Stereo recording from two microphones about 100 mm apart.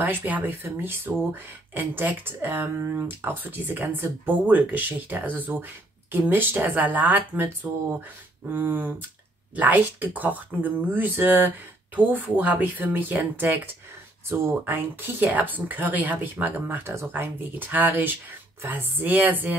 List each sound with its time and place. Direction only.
0.0 s speech: 20° right (ahead or behind)